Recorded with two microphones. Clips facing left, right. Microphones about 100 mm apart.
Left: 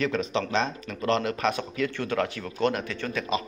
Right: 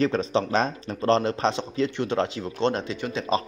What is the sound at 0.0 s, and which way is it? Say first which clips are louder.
Speech: right 4 dB; 35° right (ahead or behind).